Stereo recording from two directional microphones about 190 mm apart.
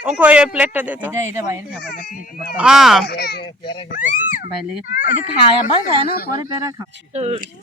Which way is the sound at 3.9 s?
45° left (ahead or behind).